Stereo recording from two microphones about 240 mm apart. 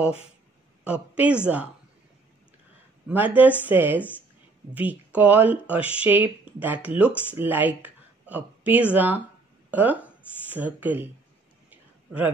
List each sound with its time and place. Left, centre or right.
0.8 s a woman's voice: centre
3.1 s speech: centre
7.1 s speech: centre
7.3 s speech: centre
11.7 s a sound: centre